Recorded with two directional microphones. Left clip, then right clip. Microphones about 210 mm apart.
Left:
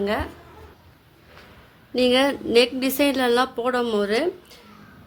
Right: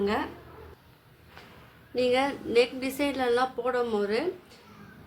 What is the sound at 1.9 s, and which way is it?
A woman's voice, 45° left (ahead or behind).